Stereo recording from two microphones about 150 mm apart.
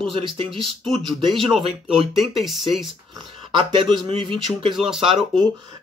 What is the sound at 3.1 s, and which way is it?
Speech, 35° right (ahead or behind).